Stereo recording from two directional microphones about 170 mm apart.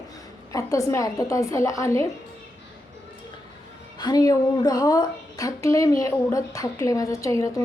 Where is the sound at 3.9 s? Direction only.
25° left (ahead or behind).